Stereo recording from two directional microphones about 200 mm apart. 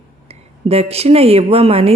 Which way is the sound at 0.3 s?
30° right (ahead or behind).